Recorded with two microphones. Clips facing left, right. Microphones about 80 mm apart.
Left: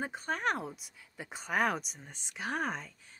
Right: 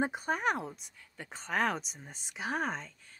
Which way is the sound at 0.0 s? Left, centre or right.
Centre.